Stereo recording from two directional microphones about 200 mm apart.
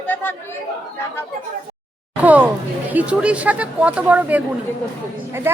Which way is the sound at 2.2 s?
5° right (ahead or behind).